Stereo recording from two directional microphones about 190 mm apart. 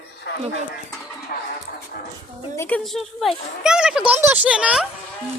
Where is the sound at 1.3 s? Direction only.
45° left (ahead or behind).